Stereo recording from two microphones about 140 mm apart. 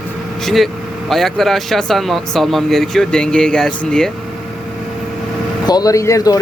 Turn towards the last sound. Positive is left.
turn(degrees=25)  # may be behind; listen again after turning